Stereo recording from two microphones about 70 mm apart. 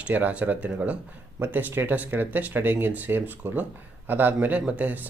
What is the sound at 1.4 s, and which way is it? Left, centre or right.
Speech, right.